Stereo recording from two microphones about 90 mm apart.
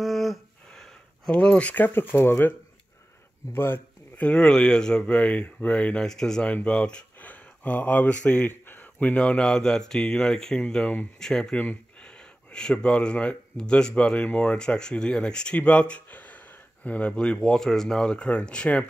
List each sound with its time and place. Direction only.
0.0 s a sound: centre (ahead or behind); by 2.5 s 25° left (ahead or behind)
3.5 s speech: 25° left (ahead or behind)
4.3 s speech: 10° left (ahead or behind)